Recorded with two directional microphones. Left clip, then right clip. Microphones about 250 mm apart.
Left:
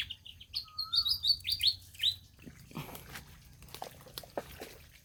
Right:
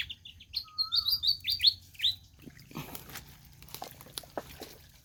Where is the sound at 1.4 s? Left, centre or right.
Right.